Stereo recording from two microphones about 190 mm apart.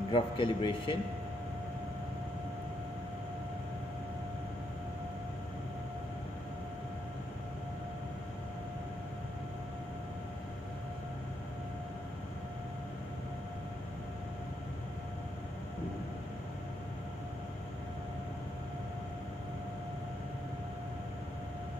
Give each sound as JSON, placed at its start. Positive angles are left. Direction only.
{"t": 0.1, "sound": "a man's voice", "side_deg": 25}